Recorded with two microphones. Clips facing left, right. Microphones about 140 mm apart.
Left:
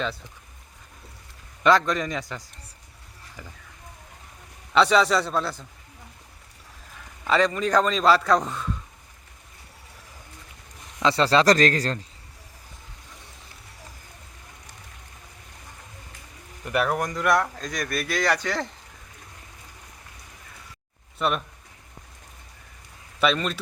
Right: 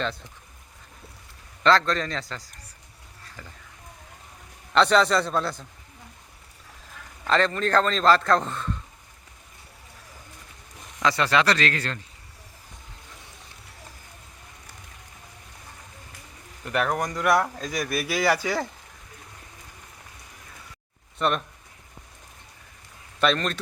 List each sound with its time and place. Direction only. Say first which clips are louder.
1.6 s a man's voice: left 1 dB; 15° left (ahead or behind)
4.7 s speech: even; 5° left (ahead or behind)
7.3 s a man's voice: left 1 dB; 10° left (ahead or behind)
11.0 s a man's voice: left 3 dB; 30° left (ahead or behind)
16.7 s speech: left 1 dB; 5° left (ahead or behind)
21.2 s speech: right 1 dB; 5° left (ahead or behind)
23.2 s speech: even; 5° left (ahead or behind)